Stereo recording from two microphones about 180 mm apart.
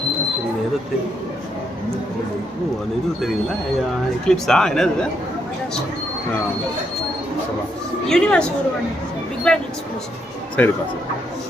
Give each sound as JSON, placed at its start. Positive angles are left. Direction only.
{"t": 4.3, "sound": "a man's voice", "side_deg": 5}
{"t": 8.1, "sound": "a man's voice", "side_deg": 5}
{"t": 9.5, "sound": "a man's voice", "side_deg": 5}